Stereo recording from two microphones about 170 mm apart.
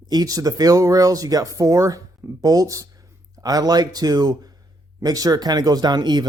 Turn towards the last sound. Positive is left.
turn(degrees=-25)  # may be behind; listen again after turning